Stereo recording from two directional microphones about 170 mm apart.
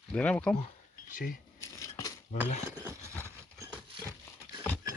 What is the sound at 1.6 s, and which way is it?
Scissors, 15° left (ahead or behind).